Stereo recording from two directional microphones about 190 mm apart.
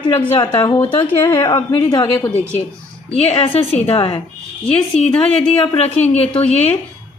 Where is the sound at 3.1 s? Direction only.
30° left (ahead or behind).